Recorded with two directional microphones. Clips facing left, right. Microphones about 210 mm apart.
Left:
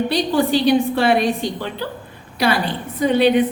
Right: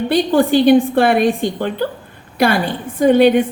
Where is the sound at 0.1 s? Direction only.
50° right (ahead or behind).